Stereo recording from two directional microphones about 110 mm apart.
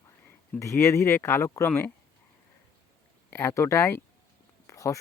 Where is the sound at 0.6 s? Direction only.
25° left (ahead or behind).